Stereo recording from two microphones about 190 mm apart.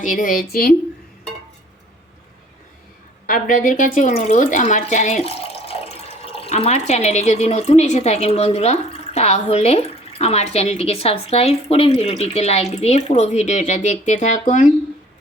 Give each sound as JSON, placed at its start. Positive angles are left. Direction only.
{"t": 0.0, "sound": "speech", "side_deg": 45}
{"t": 3.2, "sound": "speech", "side_deg": 45}